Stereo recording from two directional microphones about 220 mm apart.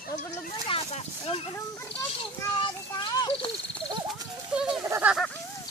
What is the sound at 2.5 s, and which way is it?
Speech, 20° left (ahead or behind).